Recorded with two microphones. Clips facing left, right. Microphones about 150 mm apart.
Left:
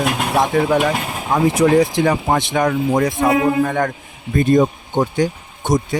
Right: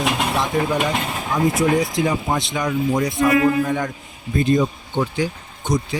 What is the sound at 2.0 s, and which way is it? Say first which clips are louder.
Speech: left 4 dB; 60° left (ahead or behind).